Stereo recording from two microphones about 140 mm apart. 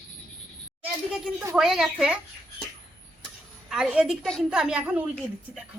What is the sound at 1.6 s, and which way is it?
Speech, 5° right (ahead or behind).